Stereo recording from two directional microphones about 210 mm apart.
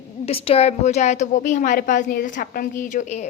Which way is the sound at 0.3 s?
25° left (ahead or behind).